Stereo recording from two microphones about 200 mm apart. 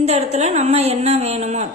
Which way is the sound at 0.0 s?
30° right (ahead or behind).